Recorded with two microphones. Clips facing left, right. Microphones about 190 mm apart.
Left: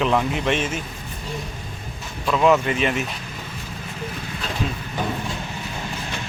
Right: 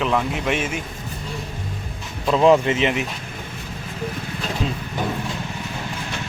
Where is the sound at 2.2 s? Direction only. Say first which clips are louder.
Right 3 dB; 30° right (ahead or behind).